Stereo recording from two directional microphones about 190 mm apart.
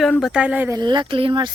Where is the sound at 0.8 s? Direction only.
25° right (ahead or behind).